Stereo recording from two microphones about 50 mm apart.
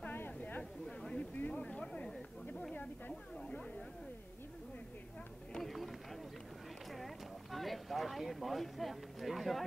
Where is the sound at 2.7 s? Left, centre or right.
Left.